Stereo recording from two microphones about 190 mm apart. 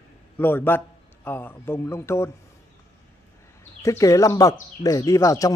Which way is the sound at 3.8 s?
15° left (ahead or behind).